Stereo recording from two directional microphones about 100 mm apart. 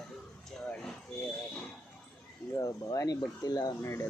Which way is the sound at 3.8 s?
25° left (ahead or behind).